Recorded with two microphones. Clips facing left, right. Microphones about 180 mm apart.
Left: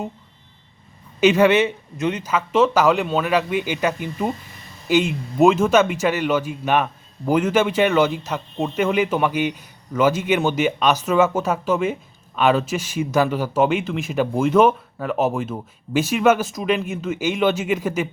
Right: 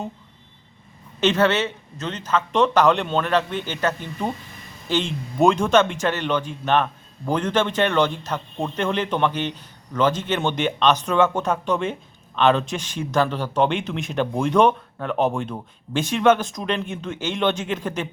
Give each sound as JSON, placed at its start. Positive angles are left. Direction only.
{"t": 1.2, "sound": "speech", "side_deg": 10}